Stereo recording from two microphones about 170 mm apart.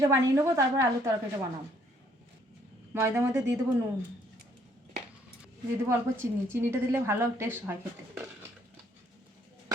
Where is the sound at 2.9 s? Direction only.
15° right (ahead or behind).